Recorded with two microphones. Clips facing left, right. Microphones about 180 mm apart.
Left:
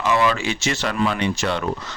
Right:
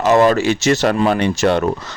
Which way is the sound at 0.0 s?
40° right (ahead or behind).